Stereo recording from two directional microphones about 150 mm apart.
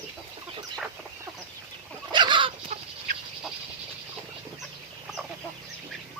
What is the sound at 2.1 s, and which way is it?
Chicken, 30° right (ahead or behind).